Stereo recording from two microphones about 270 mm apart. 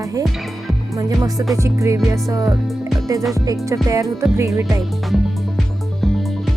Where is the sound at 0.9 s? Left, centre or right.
Centre.